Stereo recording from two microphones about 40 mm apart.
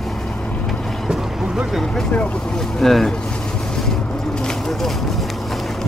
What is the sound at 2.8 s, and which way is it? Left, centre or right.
Speech, centre.